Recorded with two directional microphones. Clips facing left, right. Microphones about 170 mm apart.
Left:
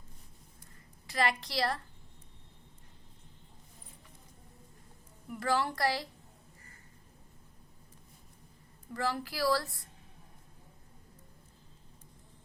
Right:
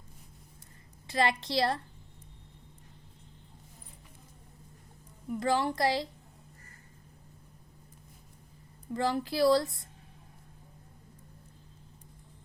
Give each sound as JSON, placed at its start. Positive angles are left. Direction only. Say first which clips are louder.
{"t": 1.0, "sound": "speech", "louder": "right 3 dB", "side_deg": -25}
{"t": 5.4, "sound": "speech", "louder": "right 3 dB", "side_deg": -20}
{"t": 8.9, "sound": "speech", "louder": "right 5 dB", "side_deg": -20}